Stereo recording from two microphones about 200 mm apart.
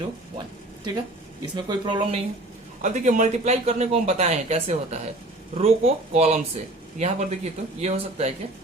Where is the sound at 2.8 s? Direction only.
40° right (ahead or behind).